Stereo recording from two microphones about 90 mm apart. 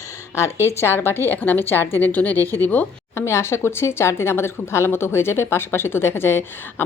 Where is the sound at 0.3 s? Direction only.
30° left (ahead or behind).